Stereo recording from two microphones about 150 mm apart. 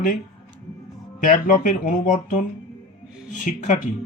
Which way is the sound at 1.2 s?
60° left (ahead or behind).